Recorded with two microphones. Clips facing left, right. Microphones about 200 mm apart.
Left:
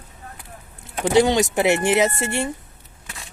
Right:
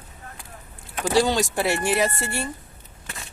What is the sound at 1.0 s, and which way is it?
Speech, 20° left (ahead or behind).